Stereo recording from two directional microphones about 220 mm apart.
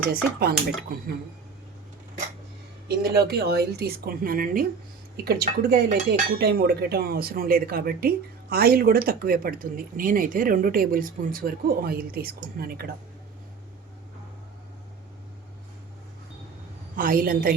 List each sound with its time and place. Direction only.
0.1 s speech: 45° right (ahead or behind)
2.8 s speech: 45° right (ahead or behind)
17.0 s a woman's voice: 40° right (ahead or behind)